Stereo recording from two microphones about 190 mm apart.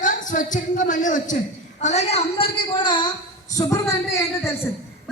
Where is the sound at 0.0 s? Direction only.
45° left (ahead or behind).